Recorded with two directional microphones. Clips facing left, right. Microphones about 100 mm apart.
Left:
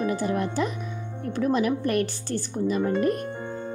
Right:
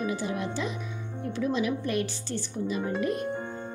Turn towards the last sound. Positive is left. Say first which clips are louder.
# left 5 dB
turn(degrees=50)  # may be behind; listen again after turning